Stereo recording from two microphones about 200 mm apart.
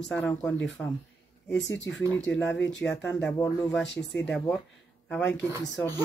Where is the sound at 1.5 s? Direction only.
65° left (ahead or behind).